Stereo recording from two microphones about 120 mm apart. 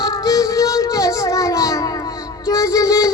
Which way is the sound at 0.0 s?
30° left (ahead or behind).